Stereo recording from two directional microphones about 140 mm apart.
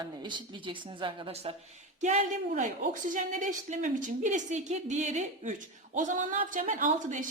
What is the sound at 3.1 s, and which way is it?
A woman's voice, 65° right (ahead or behind).